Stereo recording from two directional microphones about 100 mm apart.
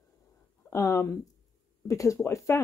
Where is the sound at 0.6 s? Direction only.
30° left (ahead or behind).